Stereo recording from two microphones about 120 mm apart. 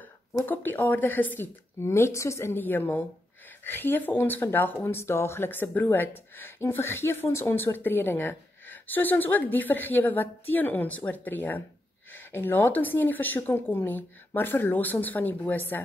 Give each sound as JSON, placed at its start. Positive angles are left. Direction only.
{"t": 0.0, "sound": "speech", "side_deg": 15}